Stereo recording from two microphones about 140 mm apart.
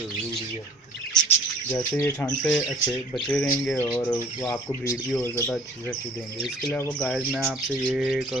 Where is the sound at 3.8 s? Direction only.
10° left (ahead or behind).